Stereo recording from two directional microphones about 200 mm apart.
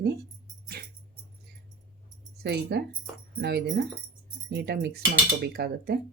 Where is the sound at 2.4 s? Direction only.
55° right (ahead or behind).